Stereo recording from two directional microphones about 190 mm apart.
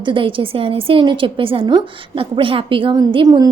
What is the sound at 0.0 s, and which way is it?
A woman's voice, 25° right (ahead or behind).